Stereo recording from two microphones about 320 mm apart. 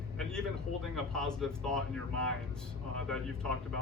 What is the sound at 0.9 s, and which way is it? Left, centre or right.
Speech, centre.